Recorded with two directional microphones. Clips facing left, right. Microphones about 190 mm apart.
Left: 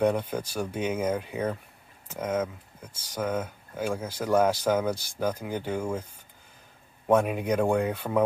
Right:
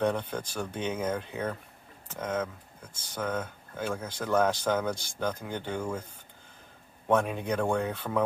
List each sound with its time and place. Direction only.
0.0 s speech: 10° left (ahead or behind)
7.1 s speech: 10° left (ahead or behind)